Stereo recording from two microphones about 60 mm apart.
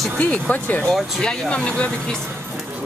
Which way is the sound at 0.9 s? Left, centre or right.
Centre.